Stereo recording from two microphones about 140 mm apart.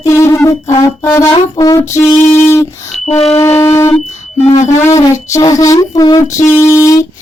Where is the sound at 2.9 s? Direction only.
50° left (ahead or behind).